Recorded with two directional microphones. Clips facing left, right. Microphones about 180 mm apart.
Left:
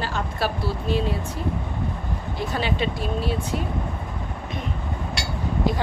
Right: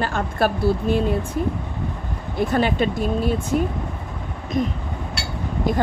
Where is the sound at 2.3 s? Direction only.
50° right (ahead or behind).